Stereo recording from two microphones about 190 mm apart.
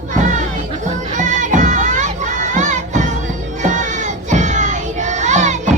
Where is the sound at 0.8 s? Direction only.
40° right (ahead or behind).